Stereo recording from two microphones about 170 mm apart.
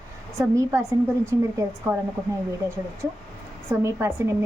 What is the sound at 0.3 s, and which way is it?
A woman's voice, 15° right (ahead or behind).